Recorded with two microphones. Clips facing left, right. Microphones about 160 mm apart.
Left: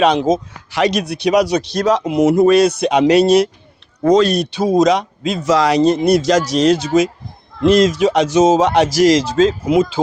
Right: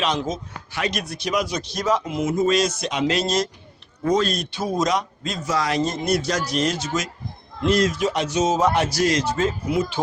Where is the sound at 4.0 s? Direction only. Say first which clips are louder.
Left 9 dB; 80° left.